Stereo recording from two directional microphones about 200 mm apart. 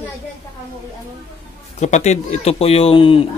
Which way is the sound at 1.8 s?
35° left (ahead or behind).